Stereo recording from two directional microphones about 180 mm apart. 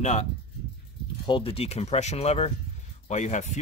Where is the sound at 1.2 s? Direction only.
30° left (ahead or behind).